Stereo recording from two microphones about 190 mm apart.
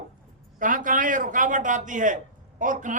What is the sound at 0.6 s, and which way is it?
A man's voice, 45° right (ahead or behind).